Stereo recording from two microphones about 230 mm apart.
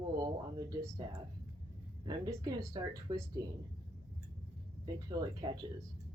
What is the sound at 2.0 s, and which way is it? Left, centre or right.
Speech, centre.